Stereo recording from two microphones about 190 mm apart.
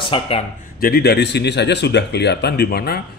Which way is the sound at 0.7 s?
55° left (ahead or behind).